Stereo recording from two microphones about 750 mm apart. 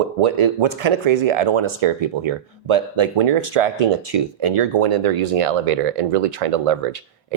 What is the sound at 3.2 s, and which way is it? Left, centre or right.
Speech, right.